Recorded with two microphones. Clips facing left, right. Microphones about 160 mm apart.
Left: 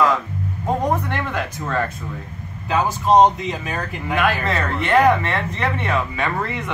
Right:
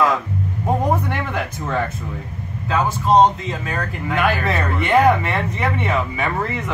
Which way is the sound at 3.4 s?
5° left (ahead or behind).